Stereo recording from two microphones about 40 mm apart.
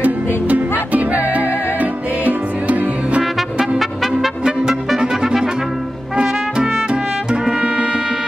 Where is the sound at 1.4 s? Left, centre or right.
Left.